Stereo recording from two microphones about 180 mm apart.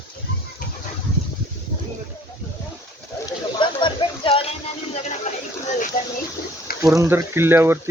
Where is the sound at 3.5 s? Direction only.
25° left (ahead or behind).